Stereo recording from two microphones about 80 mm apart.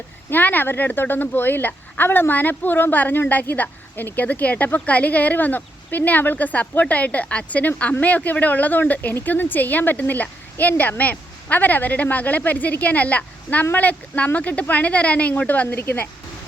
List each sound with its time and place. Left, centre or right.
0.3 s speech: left